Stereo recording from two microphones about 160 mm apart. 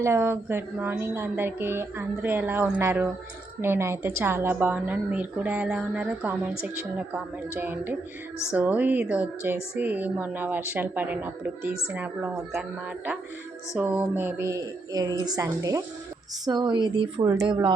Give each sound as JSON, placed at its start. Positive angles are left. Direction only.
{"t": 0.0, "sound": "speech", "side_deg": -15}
{"t": 13.7, "sound": "a woman's voice", "side_deg": -10}